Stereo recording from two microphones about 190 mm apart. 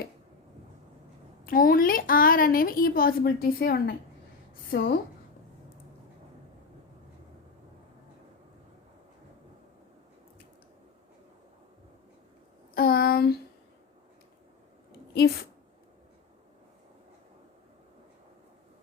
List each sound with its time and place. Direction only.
1.5 s a woman's voice: 50° left (ahead or behind)
12.7 s a woman's voice: 50° left (ahead or behind)
15.1 s a woman's voice: 55° left (ahead or behind)